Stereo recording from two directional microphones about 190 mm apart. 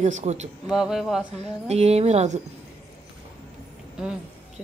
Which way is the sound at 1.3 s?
35° right (ahead or behind).